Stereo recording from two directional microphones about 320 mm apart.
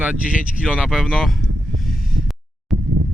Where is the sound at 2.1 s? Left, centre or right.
Right.